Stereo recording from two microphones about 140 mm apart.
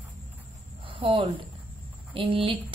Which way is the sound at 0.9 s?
35° right (ahead or behind).